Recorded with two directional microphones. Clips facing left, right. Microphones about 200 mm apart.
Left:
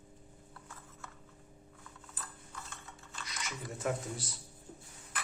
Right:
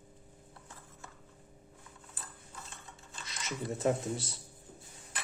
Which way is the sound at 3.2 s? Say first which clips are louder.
Right 5 dB; 25° right (ahead or behind).